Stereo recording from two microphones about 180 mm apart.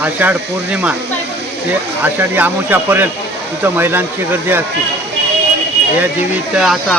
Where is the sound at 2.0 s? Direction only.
10° right (ahead or behind).